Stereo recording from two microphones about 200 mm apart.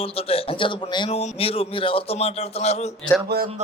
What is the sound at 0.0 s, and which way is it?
A man's voice, 30° left (ahead or behind).